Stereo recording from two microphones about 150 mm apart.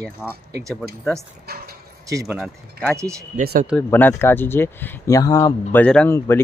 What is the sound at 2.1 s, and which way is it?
Speech, 20° right (ahead or behind).